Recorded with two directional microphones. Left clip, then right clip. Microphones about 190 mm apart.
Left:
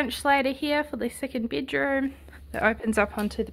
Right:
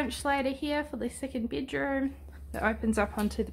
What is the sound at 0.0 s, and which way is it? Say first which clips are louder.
A woman's voice: left 6 dB; 25° left (ahead or behind).